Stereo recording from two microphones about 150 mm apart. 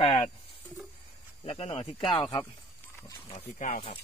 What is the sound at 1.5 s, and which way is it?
Speech, 35° left (ahead or behind).